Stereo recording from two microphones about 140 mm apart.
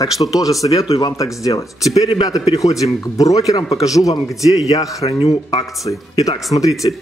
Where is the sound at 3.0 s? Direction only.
25° left (ahead or behind).